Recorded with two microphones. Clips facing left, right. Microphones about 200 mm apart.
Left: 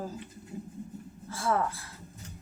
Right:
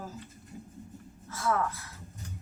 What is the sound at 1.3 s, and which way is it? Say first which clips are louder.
Speech: left 1 dB; 30° left (ahead or behind).